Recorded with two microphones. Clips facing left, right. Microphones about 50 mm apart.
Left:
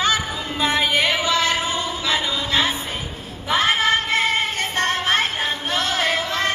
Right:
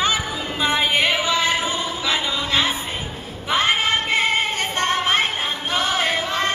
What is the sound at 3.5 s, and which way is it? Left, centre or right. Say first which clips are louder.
Female singing: left 1 dB; right.